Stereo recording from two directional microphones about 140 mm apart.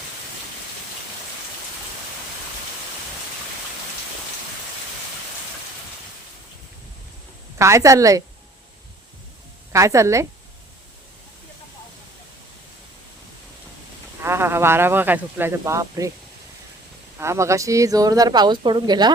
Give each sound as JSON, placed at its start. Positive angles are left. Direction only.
{"t": 7.6, "sound": "a woman's voice", "side_deg": -20}
{"t": 9.7, "sound": "a woman's voice", "side_deg": -20}
{"t": 14.2, "sound": "speech", "side_deg": -15}
{"t": 17.2, "sound": "a woman's voice", "side_deg": -20}